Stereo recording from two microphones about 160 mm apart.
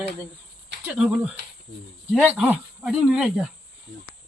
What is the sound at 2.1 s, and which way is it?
Speech, 10° right (ahead or behind).